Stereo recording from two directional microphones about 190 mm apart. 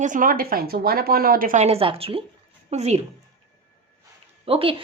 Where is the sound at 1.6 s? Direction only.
30° right (ahead or behind).